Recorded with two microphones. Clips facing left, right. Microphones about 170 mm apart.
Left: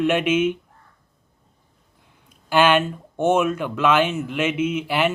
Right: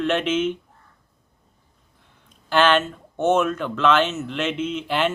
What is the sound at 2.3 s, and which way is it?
Speech, 10° left (ahead or behind).